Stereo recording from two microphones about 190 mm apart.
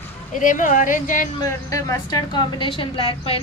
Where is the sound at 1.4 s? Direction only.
15° left (ahead or behind).